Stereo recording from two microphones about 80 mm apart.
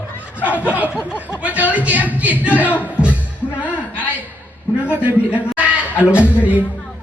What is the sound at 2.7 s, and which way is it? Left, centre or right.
Music, left.